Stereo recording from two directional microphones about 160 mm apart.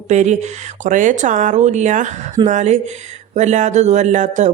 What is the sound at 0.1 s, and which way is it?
Speech, 50° right (ahead or behind).